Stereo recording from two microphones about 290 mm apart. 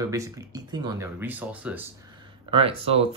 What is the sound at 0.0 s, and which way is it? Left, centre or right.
Speech, centre.